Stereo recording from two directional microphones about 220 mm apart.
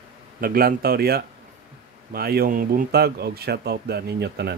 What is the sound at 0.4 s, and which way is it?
Speech, 45° right (ahead or behind).